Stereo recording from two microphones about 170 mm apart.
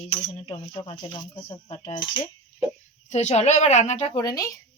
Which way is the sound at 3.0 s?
40° left (ahead or behind).